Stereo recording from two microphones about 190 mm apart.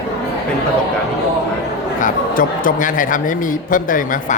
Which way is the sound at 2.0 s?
45° left (ahead or behind).